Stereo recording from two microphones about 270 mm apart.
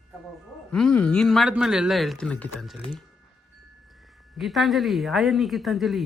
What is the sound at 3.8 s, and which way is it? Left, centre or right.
Speech, centre.